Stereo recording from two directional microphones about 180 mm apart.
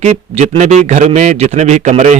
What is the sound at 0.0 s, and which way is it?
A man's voice, 35° right (ahead or behind).